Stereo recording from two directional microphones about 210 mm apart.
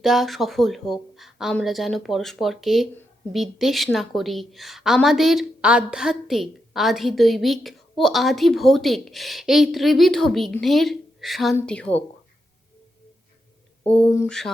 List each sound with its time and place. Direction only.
0.0 s a woman's voice: centre (ahead or behind)
13.9 s speech: 10° left (ahead or behind)